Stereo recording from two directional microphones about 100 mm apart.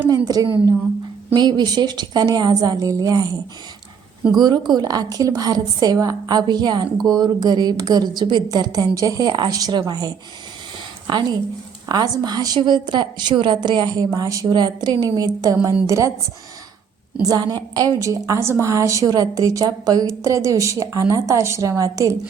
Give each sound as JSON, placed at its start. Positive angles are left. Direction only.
{"t": 0.3, "sound": "a woman's voice", "side_deg": -40}
{"t": 4.4, "sound": "a woman's voice", "side_deg": -45}
{"t": 15.6, "sound": "a woman's voice", "side_deg": -30}
{"t": 17.2, "sound": "a woman's voice", "side_deg": -40}